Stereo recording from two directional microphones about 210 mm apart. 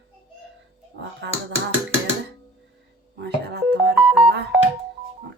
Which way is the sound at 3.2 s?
50° right (ahead or behind).